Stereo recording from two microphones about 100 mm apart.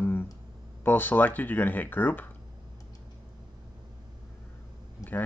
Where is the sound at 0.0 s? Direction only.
20° left (ahead or behind).